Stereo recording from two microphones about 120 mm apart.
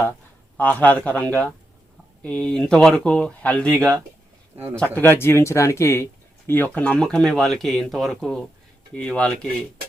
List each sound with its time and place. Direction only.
0.5 s speech: 15° left (ahead or behind)
4.5 s speech: 20° right (ahead or behind)
4.9 s speech: 20° left (ahead or behind)